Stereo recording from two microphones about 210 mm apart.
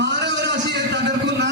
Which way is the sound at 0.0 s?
55° right (ahead or behind).